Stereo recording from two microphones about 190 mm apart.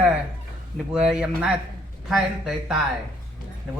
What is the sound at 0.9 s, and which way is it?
Speech, 5° right (ahead or behind).